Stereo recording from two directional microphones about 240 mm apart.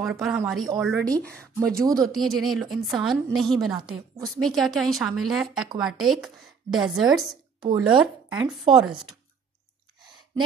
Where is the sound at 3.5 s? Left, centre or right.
Centre.